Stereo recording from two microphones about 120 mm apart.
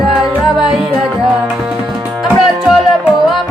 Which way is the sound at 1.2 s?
5° right (ahead or behind).